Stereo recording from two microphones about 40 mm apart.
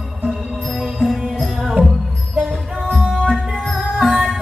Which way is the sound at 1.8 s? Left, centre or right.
Left.